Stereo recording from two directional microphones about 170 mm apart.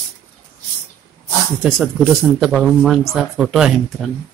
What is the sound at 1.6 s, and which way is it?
Speech, centre (ahead or behind).